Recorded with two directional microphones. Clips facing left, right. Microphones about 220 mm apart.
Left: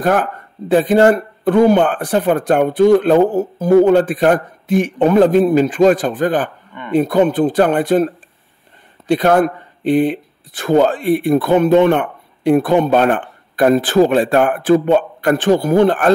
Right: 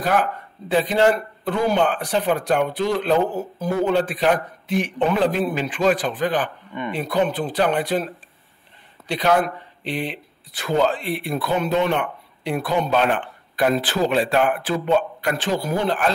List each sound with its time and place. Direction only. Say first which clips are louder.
0.0 s speech: left 5 dB; 50° left (ahead or behind)